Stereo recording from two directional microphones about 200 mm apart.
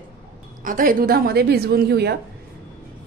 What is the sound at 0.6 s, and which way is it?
A woman's voice, 45° right (ahead or behind).